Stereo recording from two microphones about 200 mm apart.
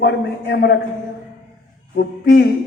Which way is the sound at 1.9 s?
55° left (ahead or behind).